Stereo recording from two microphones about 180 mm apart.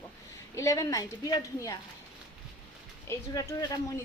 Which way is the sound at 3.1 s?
20° left (ahead or behind).